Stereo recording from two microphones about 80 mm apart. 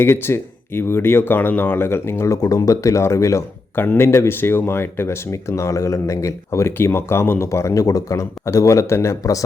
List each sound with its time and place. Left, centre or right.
0.0 s speech: left
3.8 s speech: left